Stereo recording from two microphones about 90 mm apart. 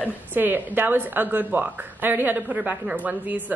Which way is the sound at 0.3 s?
20° right (ahead or behind).